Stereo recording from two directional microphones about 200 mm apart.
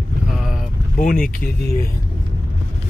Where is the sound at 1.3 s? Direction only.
45° left (ahead or behind).